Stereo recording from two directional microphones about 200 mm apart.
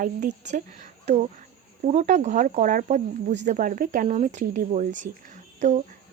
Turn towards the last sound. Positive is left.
turn(degrees=-35)  # may be behind; listen again after turning